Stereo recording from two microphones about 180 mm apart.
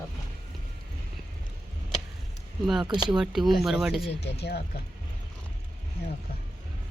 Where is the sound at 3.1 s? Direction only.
Centre (ahead or behind).